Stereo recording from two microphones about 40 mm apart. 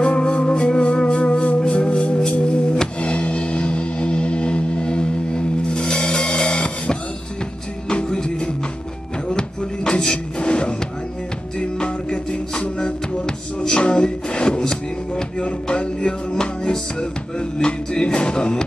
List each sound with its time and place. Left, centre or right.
0.0 s music: left
11.8 s music: left
14.6 s a sound: centre
15.4 s music: left